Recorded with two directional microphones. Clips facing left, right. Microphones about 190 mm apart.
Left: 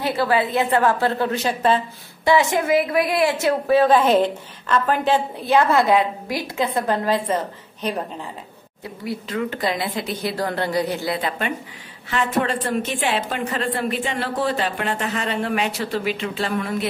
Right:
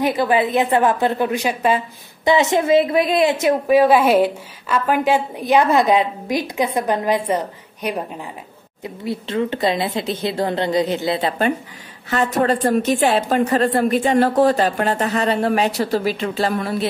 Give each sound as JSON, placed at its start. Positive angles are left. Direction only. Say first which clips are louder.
{"t": 0.0, "sound": "a woman's voice", "louder": "right 3 dB", "side_deg": -15}
{"t": 2.2, "sound": "a woman's voice", "louder": "right 2 dB", "side_deg": -20}
{"t": 8.8, "sound": "a woman's voice", "louder": "right 3 dB", "side_deg": -25}